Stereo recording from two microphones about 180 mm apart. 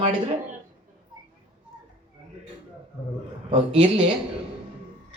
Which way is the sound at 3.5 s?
30° right (ahead or behind).